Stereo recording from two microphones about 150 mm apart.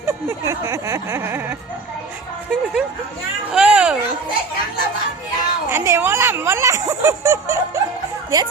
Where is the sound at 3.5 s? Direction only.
5° right (ahead or behind).